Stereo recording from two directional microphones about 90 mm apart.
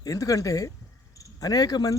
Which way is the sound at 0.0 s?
40° left (ahead or behind).